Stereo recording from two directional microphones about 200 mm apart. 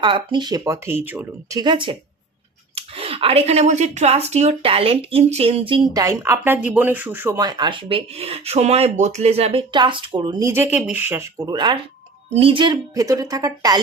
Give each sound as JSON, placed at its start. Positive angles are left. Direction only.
{"t": 0.0, "sound": "a woman's voice", "side_deg": -25}